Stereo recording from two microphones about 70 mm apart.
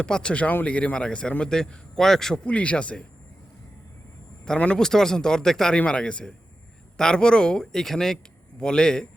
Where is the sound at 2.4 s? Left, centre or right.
Centre.